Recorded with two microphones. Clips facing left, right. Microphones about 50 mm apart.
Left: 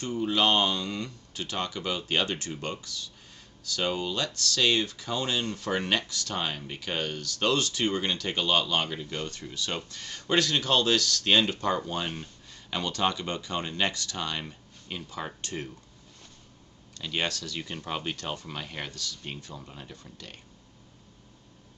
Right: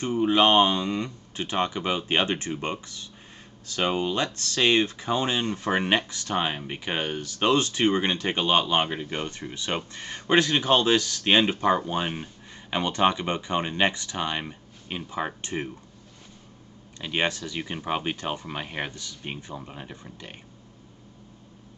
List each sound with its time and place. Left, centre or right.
0.0 s speech: right
17.0 s speech: right